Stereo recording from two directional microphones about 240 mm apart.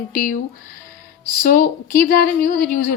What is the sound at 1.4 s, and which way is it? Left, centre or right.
A woman's voice, left.